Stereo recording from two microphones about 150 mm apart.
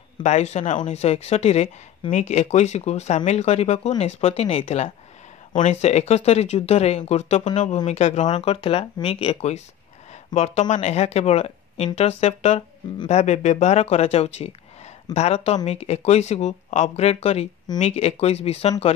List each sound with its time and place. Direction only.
0.2 s speech: 45° left (ahead or behind)
8.3 s speech: 35° left (ahead or behind)